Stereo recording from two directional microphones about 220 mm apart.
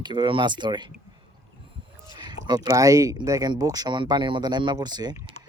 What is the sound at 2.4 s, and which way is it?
Speech, 15° right (ahead or behind).